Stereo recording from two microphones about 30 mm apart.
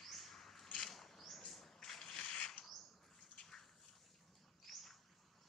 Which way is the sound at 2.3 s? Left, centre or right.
Left.